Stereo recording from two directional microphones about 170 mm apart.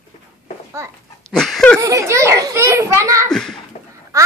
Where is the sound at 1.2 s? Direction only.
Centre (ahead or behind).